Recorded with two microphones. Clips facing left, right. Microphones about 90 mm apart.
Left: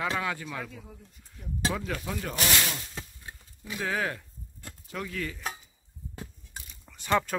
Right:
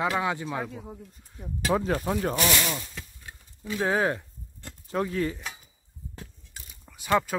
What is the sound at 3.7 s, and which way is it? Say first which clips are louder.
Speech: right 6 dB; 30° right (ahead or behind).